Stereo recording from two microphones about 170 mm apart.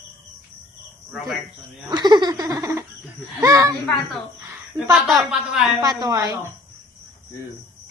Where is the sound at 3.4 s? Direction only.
20° right (ahead or behind).